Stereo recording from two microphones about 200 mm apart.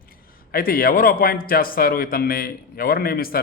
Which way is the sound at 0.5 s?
45° left (ahead or behind).